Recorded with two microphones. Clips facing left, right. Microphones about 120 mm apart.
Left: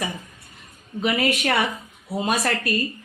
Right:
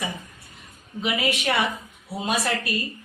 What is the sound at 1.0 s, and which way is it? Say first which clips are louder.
Speech: left 3 dB; 50° left (ahead or behind).